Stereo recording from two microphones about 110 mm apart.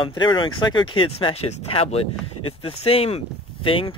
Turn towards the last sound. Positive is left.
turn(degrees=55)  # may be behind; listen again after turning